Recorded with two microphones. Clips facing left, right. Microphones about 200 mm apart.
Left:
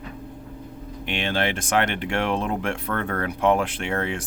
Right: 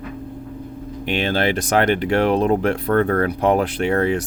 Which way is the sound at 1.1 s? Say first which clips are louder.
Right 5 dB; 35° right (ahead or behind).